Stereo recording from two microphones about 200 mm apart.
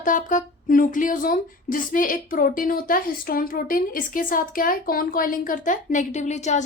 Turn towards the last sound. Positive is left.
turn(degrees=35)  # may be behind; listen again after turning